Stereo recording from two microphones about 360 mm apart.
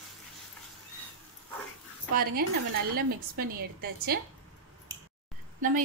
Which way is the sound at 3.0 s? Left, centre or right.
Right.